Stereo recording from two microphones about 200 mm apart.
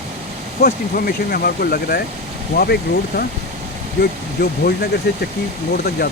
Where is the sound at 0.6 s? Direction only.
50° left (ahead or behind).